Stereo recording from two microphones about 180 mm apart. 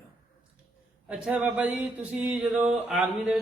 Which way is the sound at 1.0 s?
5° right (ahead or behind).